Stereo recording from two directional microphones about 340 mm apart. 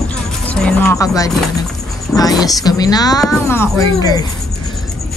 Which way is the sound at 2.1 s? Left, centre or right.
Centre.